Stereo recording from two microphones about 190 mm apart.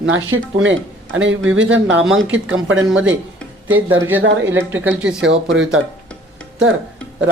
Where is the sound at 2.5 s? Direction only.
90° right.